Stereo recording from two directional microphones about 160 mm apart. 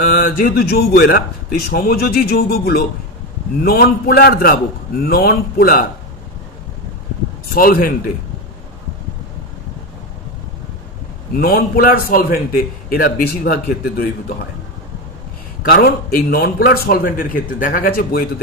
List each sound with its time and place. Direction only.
0.0 s a man's voice: 70° left (ahead or behind)
7.5 s a man's voice: 65° left (ahead or behind)
11.3 s a man's voice: 70° left (ahead or behind)
15.6 s a man's voice: 75° left (ahead or behind)